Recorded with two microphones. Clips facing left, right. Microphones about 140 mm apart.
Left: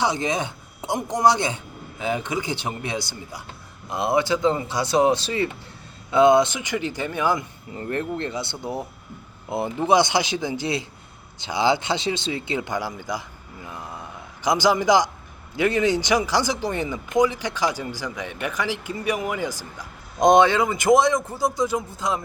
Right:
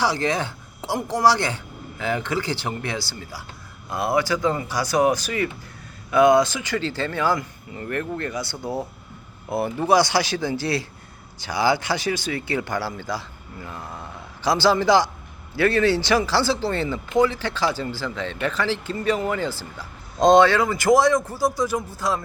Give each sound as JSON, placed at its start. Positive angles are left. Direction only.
{"t": 0.0, "sound": "speech", "side_deg": 20}
{"t": 7.7, "sound": "a man's voice", "side_deg": 30}